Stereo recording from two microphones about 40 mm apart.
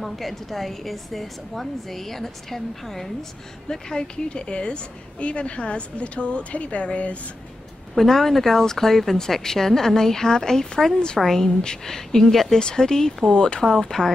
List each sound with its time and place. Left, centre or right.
0.0 s a woman's voice: centre
3.6 s a woman's voice: centre; by 7.2 s left
7.9 s a woman's voice: centre
11.6 s speech: centre
12.5 s speech: centre